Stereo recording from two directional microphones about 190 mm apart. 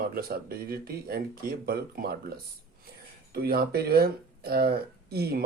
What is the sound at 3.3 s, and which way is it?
Speech, 55° right (ahead or behind).